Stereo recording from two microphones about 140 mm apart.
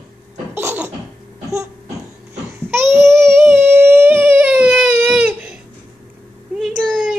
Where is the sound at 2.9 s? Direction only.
20° right (ahead or behind).